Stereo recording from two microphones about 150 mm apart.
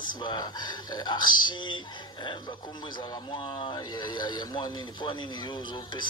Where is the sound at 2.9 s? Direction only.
30° left (ahead or behind).